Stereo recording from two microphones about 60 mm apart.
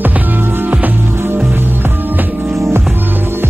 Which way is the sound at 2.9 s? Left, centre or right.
Right.